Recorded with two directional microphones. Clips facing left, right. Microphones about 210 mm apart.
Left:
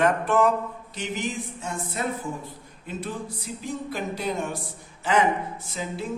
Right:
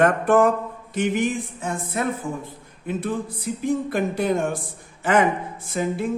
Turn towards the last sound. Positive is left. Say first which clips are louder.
# right 8 dB
turn(degrees=-55)  # may be behind; listen again after turning